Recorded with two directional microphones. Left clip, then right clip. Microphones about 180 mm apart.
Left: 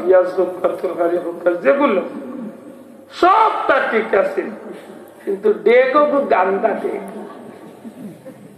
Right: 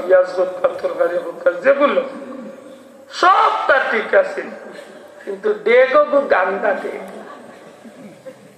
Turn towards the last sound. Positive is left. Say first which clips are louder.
# left 1 dB
turn(degrees=35)  # may be behind; listen again after turning